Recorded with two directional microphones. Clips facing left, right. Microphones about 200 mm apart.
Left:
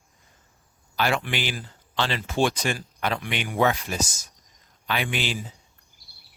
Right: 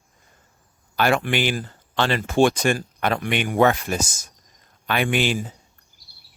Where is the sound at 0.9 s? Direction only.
50° right (ahead or behind).